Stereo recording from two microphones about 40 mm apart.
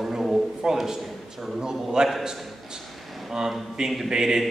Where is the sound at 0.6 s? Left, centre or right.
Right.